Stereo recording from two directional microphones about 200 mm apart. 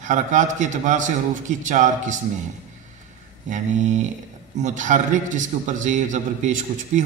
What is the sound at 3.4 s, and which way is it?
A man's voice, 40° right (ahead or behind).